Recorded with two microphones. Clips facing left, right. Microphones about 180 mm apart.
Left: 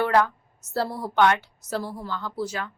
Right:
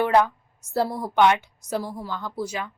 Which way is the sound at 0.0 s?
20° right (ahead or behind).